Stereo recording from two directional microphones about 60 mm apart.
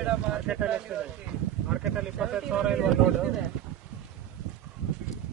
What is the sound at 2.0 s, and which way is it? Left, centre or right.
Speech, centre.